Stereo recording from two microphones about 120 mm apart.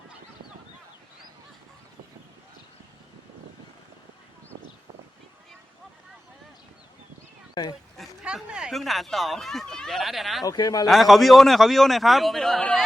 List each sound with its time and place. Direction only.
7.5 s speech: 35° left (ahead or behind)
7.9 s speech: 5° right (ahead or behind)
10.4 s a man's voice: 30° left (ahead or behind)
10.8 s speech: centre (ahead or behind)